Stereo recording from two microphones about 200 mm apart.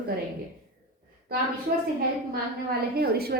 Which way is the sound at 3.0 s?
50° right (ahead or behind).